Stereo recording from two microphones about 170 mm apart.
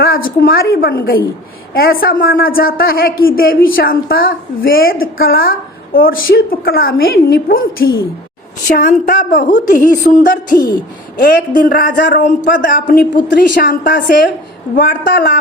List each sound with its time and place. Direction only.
0.0 s a woman's voice: 60° left (ahead or behind)